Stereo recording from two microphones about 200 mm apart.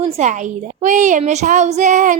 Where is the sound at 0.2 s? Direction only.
35° right (ahead or behind).